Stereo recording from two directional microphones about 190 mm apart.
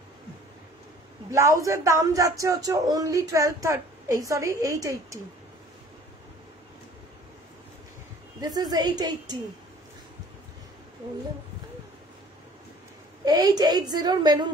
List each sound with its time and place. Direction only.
1.3 s speech: 15° right (ahead or behind)
8.4 s a woman's voice: 20° right (ahead or behind)
13.2 s a woman's voice: 20° right (ahead or behind)